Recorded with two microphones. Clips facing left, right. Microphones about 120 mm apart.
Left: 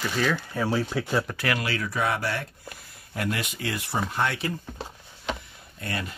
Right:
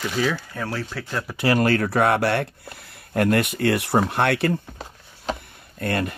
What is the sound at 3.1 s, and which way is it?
Speech, 55° right (ahead or behind).